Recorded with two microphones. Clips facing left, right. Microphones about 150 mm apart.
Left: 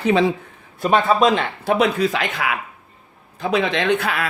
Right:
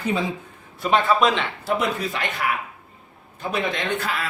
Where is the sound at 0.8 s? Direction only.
40° left (ahead or behind).